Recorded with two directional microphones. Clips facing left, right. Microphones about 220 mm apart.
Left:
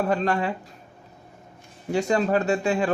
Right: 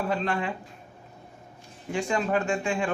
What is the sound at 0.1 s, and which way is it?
Speech, 40° left (ahead or behind).